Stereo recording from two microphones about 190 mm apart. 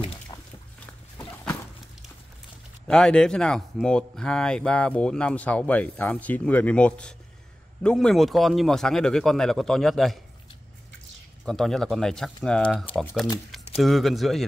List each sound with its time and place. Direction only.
0.3 s a sound: 20° left (ahead or behind)
2.9 s speech: 5° left (ahead or behind)
11.4 s speech: centre (ahead or behind)